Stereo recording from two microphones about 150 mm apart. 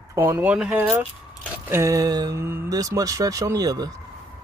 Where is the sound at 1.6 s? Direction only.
20° right (ahead or behind).